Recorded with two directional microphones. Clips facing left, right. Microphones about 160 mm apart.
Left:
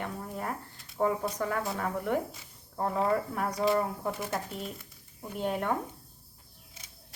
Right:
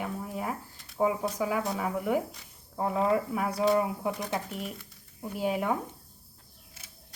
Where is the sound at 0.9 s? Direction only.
5° right (ahead or behind).